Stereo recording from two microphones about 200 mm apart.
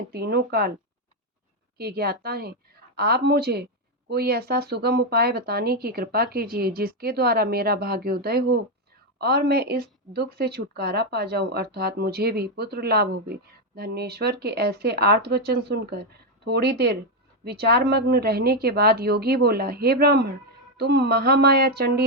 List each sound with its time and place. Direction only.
0.1 s speech: 50° right (ahead or behind)
1.8 s speech: 50° right (ahead or behind)